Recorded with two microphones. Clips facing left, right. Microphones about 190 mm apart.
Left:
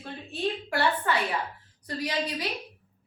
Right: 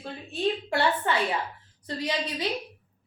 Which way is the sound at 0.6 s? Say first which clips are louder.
Right 1 dB; 25° right (ahead or behind).